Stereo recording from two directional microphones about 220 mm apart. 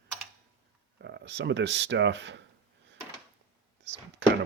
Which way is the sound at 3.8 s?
55° right (ahead or behind).